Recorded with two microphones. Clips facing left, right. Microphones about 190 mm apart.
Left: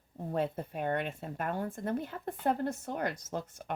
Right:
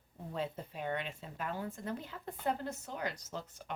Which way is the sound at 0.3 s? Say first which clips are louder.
Left 6 dB; 55° left (ahead or behind).